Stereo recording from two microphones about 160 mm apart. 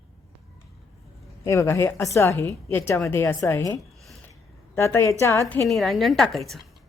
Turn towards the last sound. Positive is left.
turn(degrees=0)  # may be behind; listen again after turning